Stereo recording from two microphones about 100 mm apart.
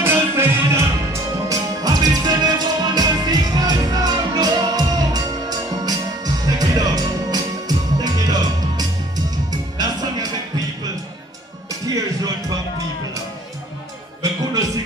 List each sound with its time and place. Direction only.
0.0 s music: 25° right (ahead or behind); by 10.3 s 40° right (ahead or behind)
11.8 s music: 35° right (ahead or behind)